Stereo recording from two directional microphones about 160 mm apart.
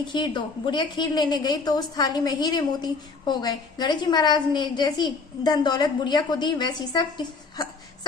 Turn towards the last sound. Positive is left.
turn(degrees=25)  # may be behind; listen again after turning